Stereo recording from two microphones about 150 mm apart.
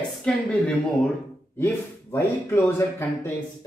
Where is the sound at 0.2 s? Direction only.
5° left (ahead or behind).